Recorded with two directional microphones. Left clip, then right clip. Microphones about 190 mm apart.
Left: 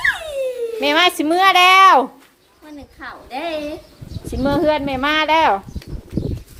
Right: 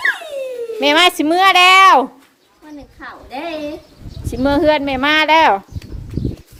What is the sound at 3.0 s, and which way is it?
Speech, 20° left (ahead or behind).